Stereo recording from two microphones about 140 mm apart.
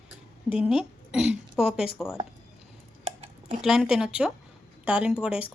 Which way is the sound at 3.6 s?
5° right (ahead or behind).